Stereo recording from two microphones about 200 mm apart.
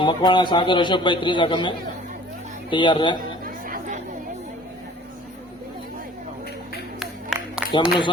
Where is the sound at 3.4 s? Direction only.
45° right (ahead or behind).